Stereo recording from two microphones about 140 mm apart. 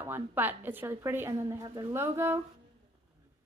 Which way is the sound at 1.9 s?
15° right (ahead or behind).